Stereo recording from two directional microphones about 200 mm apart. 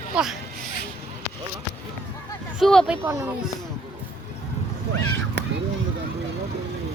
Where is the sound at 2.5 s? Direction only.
Centre (ahead or behind).